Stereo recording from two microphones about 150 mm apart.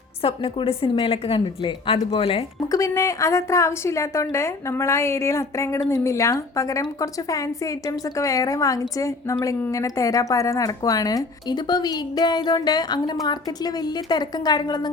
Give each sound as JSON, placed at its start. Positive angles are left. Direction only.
{"t": 0.2, "sound": "a woman's voice", "side_deg": 35}
{"t": 2.6, "sound": "a woman's voice", "side_deg": 20}